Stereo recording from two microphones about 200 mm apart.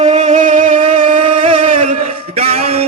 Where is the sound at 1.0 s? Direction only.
25° right (ahead or behind).